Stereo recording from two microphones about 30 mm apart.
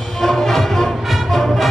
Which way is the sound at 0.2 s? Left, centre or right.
Centre.